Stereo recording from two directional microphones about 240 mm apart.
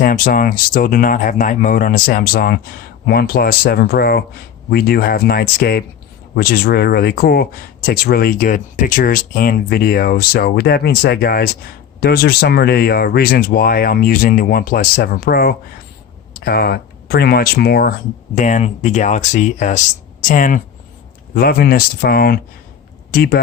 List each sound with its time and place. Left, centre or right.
0.0 s speech: left
18.3 s speech: left